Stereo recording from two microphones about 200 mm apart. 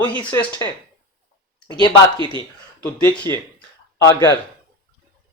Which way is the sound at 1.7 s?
20° left (ahead or behind).